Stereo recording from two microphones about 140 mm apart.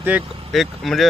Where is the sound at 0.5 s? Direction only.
Centre (ahead or behind).